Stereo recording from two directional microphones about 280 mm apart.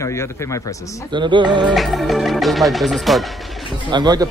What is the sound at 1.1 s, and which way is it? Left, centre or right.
Speech, centre.